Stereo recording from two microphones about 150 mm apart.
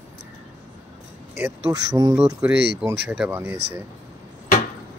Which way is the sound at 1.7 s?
25° right (ahead or behind).